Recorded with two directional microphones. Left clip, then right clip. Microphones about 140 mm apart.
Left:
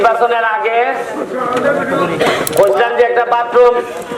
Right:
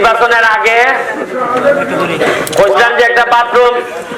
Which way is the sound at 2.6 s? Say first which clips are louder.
Right 3 dB; 25° right (ahead or behind).